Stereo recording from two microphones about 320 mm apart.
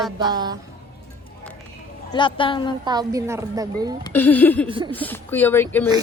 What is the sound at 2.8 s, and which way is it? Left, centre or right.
A woman's voice, centre.